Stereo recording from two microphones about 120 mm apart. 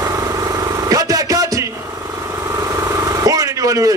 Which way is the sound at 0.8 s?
30° right (ahead or behind).